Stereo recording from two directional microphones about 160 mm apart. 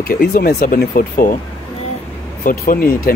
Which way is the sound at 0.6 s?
60° left (ahead or behind).